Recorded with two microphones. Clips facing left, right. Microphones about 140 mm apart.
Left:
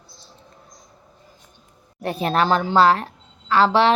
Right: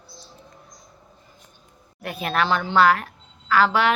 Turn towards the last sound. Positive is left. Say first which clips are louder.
# left 3 dB
turn(degrees=30)  # may be behind; listen again after turning